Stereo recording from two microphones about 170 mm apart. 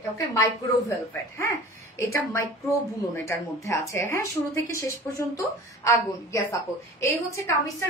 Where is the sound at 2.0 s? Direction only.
15° left (ahead or behind).